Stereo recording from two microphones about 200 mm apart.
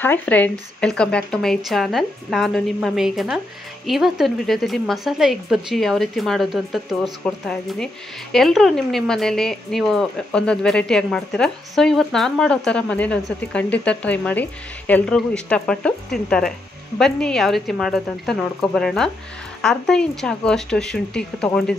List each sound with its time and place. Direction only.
0.0 s a woman's voice: 10° left (ahead or behind)